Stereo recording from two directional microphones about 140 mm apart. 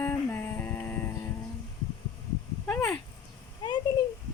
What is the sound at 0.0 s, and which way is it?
Music, 15° left (ahead or behind).